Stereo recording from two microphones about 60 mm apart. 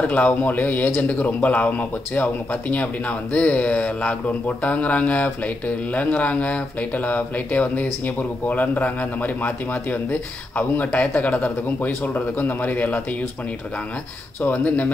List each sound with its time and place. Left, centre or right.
0.1 s speech: left
3.3 s speech: left
14.4 s speech: left